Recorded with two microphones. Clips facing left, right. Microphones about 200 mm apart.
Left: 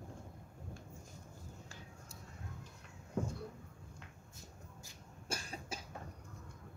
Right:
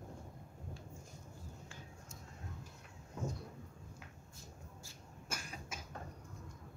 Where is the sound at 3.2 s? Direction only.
55° left (ahead or behind).